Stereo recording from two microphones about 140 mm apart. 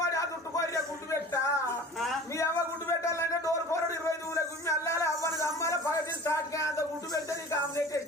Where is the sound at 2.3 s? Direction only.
20° left (ahead or behind).